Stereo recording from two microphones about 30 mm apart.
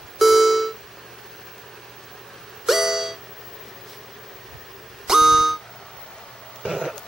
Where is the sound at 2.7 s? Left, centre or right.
Centre.